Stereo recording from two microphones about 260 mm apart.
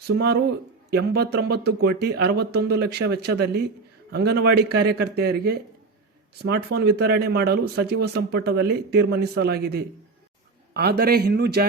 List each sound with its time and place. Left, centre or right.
0.1 s speech: right